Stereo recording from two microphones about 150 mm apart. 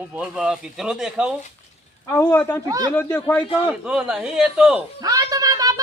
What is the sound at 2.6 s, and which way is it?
Speech, 25° right (ahead or behind).